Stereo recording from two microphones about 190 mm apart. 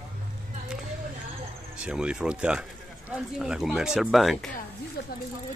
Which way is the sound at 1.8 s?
5° right (ahead or behind).